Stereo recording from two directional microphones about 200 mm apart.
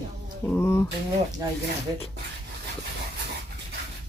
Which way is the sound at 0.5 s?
15° left (ahead or behind).